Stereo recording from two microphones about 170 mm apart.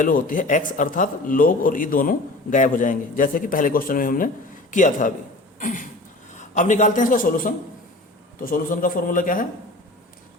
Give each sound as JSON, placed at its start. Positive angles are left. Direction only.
{"t": 0.0, "sound": "speech", "side_deg": 50}
{"t": 5.5, "sound": "a sound", "side_deg": 50}
{"t": 6.3, "sound": "a man's voice", "side_deg": 45}